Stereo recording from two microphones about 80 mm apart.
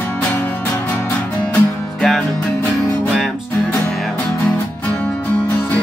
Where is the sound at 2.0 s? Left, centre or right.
Centre.